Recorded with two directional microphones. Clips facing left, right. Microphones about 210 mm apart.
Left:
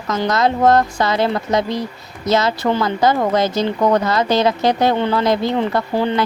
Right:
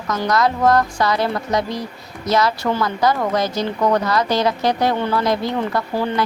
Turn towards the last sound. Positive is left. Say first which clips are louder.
# left 3 dB
turn(degrees=25)  # may be behind; listen again after turning